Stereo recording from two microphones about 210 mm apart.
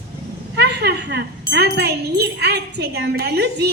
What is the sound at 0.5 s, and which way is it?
A woman's voice, 55° right (ahead or behind).